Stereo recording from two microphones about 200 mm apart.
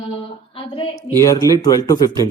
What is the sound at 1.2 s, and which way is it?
Speech, 20° left (ahead or behind).